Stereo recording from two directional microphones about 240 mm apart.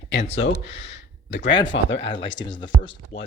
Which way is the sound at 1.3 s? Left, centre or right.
Left.